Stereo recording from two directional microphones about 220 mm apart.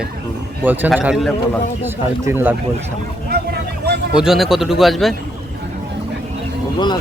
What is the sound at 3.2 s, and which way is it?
Vehicle, 45° right (ahead or behind).